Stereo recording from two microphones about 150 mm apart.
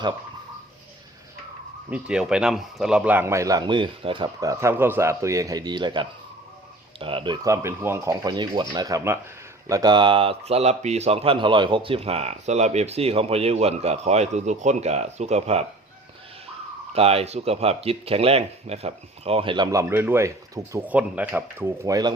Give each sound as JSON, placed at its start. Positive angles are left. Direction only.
{"t": 1.9, "sound": "a man's voice", "side_deg": -5}
{"t": 7.4, "sound": "a man's voice", "side_deg": -20}
{"t": 16.9, "sound": "speech", "side_deg": -40}
{"t": 19.7, "sound": "speech", "side_deg": -15}
{"t": 21.8, "sound": "a man's voice", "side_deg": -25}